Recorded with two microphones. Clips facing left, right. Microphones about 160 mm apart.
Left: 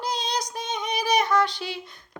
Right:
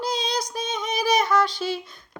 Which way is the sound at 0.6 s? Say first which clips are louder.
Right 2 dB; 15° left (ahead or behind).